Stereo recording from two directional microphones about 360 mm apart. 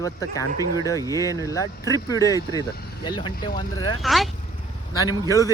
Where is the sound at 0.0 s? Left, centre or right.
Centre.